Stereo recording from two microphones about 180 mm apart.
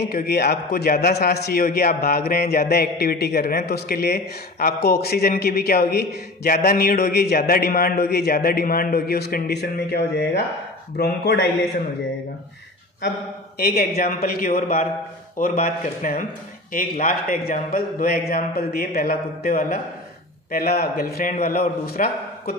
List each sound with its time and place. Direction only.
0.0 s a man's voice: 60° left (ahead or behind)
13.6 s a man's voice: 55° left (ahead or behind)